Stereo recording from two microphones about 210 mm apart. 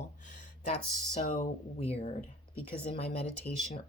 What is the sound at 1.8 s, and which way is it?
Speech, 30° left (ahead or behind).